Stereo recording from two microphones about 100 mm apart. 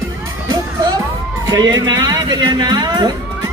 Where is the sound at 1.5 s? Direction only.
45° right (ahead or behind).